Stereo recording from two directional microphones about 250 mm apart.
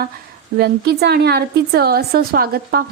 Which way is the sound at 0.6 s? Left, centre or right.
Right.